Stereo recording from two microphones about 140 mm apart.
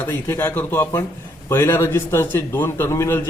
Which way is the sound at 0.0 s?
15° left (ahead or behind).